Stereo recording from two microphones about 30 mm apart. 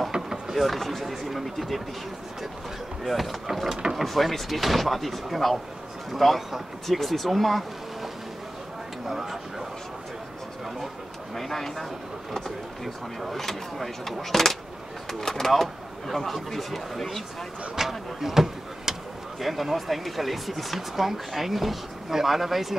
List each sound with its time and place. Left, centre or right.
0.1 s a sound: right
0.6 s speech: centre
3.0 s speech: centre
3.6 s speech: centre
3.9 s speech: centre
9.0 s speech: centre
11.3 s speech: centre
17.7 s speech: centre
19.4 s speech: centre